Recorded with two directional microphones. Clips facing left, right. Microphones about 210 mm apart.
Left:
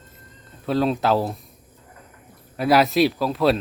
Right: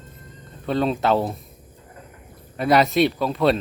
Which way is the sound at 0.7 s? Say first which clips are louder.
Even; centre (ahead or behind).